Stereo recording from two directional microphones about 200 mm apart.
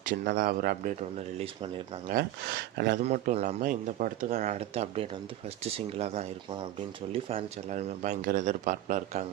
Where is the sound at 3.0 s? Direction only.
35° right (ahead or behind).